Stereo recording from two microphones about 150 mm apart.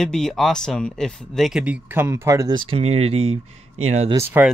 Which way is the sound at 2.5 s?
35° right (ahead or behind).